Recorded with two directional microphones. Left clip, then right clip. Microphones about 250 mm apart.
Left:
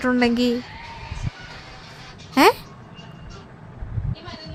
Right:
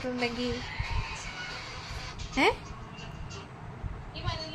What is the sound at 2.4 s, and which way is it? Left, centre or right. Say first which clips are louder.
Speech: left 10 dB; left.